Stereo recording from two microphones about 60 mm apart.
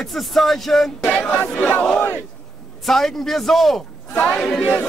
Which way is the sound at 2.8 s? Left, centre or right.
Centre.